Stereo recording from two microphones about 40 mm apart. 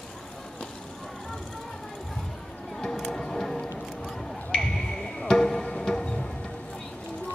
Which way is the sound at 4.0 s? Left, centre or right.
Centre.